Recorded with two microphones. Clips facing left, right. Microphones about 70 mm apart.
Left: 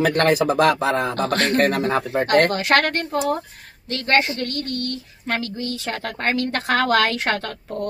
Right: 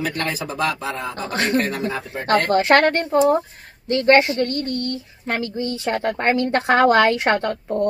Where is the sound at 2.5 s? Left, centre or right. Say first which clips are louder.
Right 4 dB; right.